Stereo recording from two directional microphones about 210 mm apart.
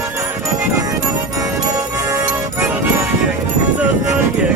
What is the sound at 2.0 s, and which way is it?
Music, 15° right (ahead or behind).